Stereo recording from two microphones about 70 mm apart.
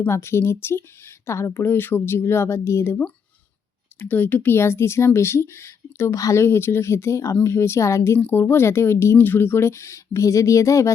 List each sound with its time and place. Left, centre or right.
0.1 s speech: left
4.0 s speech: left